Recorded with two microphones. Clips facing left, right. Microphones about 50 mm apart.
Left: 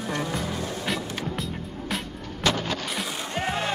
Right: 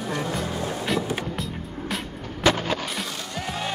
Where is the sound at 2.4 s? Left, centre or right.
Centre.